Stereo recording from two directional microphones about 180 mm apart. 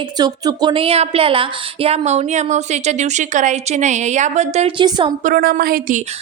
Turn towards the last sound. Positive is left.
turn(degrees=-50)  # may be behind; listen again after turning